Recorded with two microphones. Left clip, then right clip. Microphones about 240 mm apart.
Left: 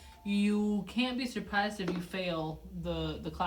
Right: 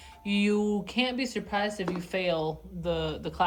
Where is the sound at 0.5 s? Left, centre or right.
Right.